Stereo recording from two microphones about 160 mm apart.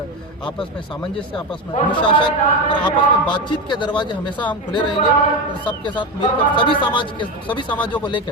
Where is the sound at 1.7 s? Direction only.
30° left (ahead or behind).